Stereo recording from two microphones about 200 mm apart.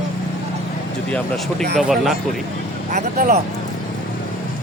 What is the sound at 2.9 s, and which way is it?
Speech, 35° right (ahead or behind).